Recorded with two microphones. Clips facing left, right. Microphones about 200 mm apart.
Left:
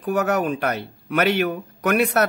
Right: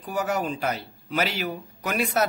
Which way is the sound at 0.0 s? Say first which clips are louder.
Left 6 dB; 60° left (ahead or behind).